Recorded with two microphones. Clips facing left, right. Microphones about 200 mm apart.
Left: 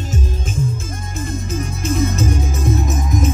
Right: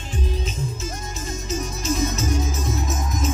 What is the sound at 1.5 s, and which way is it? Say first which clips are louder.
Music: left 3 dB; 55° left (ahead or behind).